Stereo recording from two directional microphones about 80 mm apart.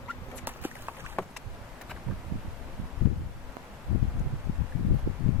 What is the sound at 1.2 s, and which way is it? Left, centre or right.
Boat, centre.